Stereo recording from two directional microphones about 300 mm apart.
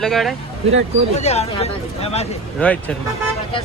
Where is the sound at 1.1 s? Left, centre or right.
Left.